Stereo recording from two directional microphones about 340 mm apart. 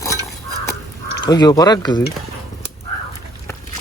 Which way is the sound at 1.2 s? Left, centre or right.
Centre.